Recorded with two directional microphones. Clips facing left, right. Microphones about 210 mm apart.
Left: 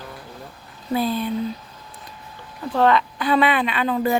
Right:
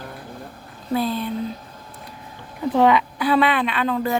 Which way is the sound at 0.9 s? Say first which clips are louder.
Left 1 dB; centre (ahead or behind).